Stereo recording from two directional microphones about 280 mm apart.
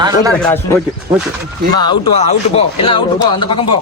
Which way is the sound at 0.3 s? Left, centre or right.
Centre.